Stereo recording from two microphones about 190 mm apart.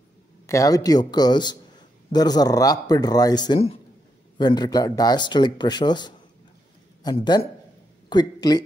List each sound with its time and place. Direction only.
0.5 s speech: 15° left (ahead or behind)